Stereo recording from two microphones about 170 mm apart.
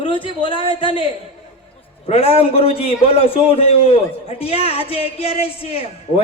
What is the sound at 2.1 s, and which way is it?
A man's voice, 35° left (ahead or behind).